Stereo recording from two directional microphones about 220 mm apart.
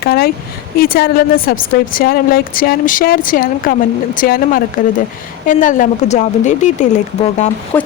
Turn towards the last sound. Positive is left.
turn(degrees=10)  # may be behind; listen again after turning